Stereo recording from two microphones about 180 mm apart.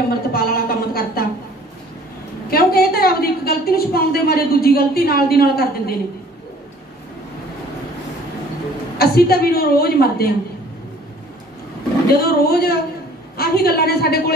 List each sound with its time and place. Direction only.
0.3 s a sound: 55° left (ahead or behind)
2.5 s a woman's voice: 55° left (ahead or behind)
8.9 s a woman's voice: 60° left (ahead or behind)
12.1 s a woman's voice: 60° left (ahead or behind)